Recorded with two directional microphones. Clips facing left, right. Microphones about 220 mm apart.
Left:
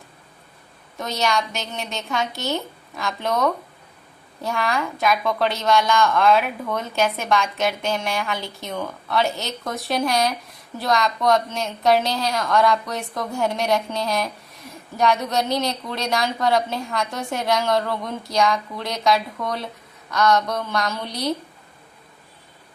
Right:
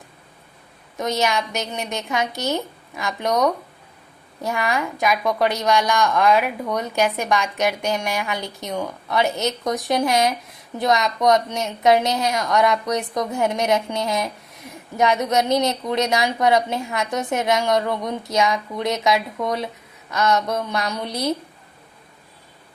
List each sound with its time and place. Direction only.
0.9 s a woman's voice: 20° right (ahead or behind)
1.2 s a woman's voice: centre (ahead or behind)
1.7 s a woman's voice: 15° right (ahead or behind)
4.5 s a woman's voice: centre (ahead or behind)
5.1 s a woman's voice: 15° right (ahead or behind)
7.9 s a woman's voice: centre (ahead or behind)
8.6 s a woman's voice: 15° right (ahead or behind)